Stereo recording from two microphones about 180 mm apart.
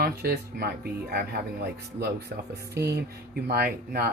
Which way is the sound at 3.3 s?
55° right (ahead or behind).